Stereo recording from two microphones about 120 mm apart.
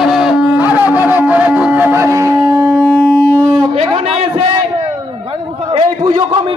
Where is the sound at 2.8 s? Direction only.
15° left (ahead or behind).